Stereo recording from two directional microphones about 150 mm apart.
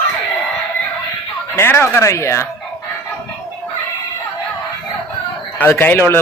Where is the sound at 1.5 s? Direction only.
15° left (ahead or behind).